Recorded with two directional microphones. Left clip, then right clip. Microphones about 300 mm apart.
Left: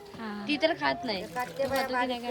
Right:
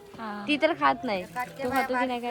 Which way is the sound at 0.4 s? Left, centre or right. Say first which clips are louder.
Right 4 dB; centre.